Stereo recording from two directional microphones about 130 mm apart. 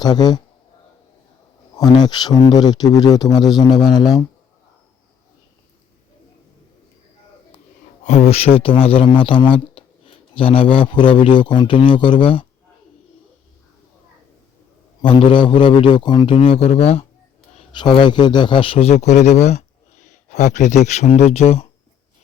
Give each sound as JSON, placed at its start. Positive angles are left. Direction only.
{"t": 0.0, "sound": "speech", "side_deg": 30}
{"t": 1.7, "sound": "speech", "side_deg": 35}
{"t": 8.0, "sound": "speech", "side_deg": 55}
{"t": 15.0, "sound": "speech", "side_deg": 40}
{"t": 17.7, "sound": "a man's voice", "side_deg": 35}